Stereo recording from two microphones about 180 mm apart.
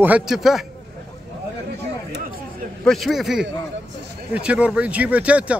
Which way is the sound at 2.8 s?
Centre (ahead or behind).